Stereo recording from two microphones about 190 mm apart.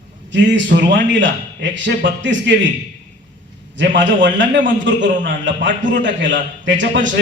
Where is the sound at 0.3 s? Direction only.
70° right (ahead or behind).